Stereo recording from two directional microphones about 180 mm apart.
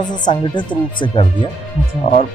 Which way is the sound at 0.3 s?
25° left (ahead or behind).